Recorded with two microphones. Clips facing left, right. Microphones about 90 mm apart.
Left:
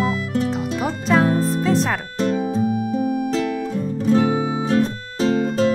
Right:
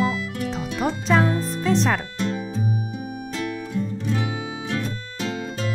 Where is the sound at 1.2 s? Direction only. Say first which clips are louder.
Left 4 dB; 45° left (ahead or behind).